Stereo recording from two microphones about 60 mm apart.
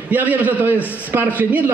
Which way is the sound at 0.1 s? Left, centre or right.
Right.